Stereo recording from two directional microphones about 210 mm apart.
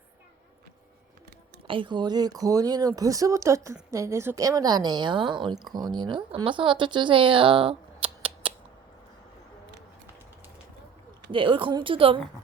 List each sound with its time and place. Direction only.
1.6 s a woman's voice: 25° right (ahead or behind)
11.3 s a woman's voice: 25° right (ahead or behind)